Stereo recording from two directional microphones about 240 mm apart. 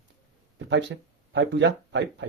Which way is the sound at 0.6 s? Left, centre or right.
Right.